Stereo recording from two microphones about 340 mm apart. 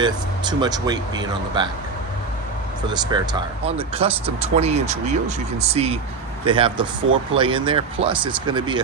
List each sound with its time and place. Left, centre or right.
0.0 s speech: centre
3.1 s speech: centre